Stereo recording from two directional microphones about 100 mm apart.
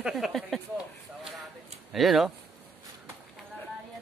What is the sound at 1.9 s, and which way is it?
Speech, centre (ahead or behind).